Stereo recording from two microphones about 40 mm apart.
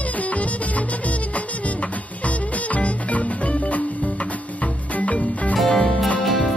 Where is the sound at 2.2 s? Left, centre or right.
Left.